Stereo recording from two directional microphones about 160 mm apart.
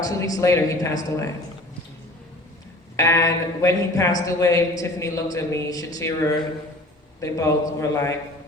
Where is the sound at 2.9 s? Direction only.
20° left (ahead or behind).